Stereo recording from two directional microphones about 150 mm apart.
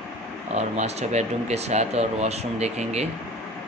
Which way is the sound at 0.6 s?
45° right (ahead or behind).